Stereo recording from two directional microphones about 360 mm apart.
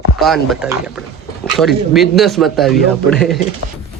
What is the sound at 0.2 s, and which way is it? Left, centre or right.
Speech, centre.